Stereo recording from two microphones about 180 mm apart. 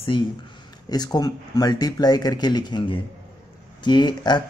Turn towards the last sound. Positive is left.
turn(degrees=25)  # may be behind; listen again after turning